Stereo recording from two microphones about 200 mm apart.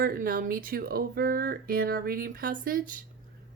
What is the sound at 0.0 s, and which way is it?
Speech, 45° right (ahead or behind).